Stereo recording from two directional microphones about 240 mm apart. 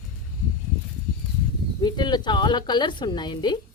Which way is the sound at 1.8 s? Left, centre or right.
Centre.